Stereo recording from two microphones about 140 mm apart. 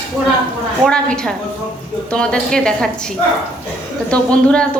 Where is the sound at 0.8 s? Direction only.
5° left (ahead or behind).